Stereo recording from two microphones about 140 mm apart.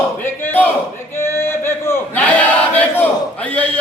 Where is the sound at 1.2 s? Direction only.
20° left (ahead or behind).